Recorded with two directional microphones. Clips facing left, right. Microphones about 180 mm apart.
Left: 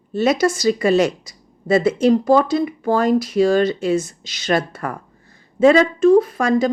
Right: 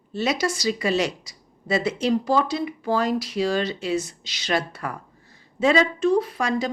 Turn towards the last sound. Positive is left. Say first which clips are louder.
# left 7 dB
turn(degrees=50)  # may be behind; listen again after turning